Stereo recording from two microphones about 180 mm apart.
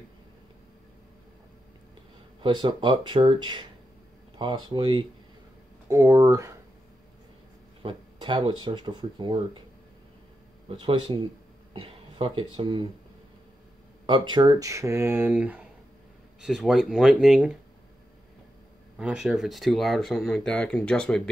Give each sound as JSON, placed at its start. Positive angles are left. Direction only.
{"t": 2.4, "sound": "speech", "side_deg": -25}
{"t": 7.8, "sound": "speech", "side_deg": -25}
{"t": 10.7, "sound": "speech", "side_deg": -30}
{"t": 11.7, "sound": "a sound", "side_deg": -30}
{"t": 12.5, "sound": "speech", "side_deg": -25}
{"t": 14.0, "sound": "speech", "side_deg": -25}
{"t": 18.9, "sound": "speech", "side_deg": -5}